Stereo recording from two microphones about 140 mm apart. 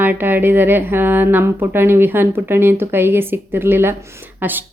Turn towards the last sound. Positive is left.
turn(degrees=-15)  # may be behind; listen again after turning